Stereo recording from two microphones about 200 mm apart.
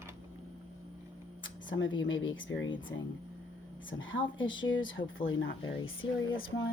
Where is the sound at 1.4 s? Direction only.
70° left (ahead or behind).